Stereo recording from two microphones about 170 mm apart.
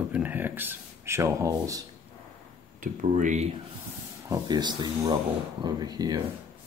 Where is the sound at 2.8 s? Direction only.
50° right (ahead or behind).